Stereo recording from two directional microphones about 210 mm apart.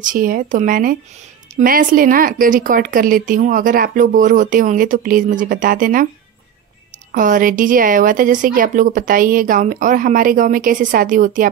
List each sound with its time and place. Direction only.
0.0 s a woman's voice: 40° right (ahead or behind)
7.1 s a woman's voice: 40° right (ahead or behind)